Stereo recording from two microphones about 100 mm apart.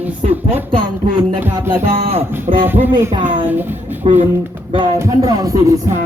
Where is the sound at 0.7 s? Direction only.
55° right (ahead or behind).